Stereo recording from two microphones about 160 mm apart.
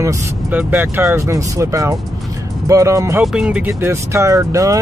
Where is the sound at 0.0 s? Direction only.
15° right (ahead or behind).